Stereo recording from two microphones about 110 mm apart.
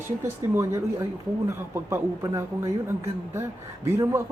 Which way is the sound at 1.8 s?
25° right (ahead or behind).